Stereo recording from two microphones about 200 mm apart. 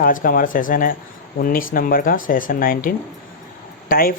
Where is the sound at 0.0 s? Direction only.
45° left (ahead or behind).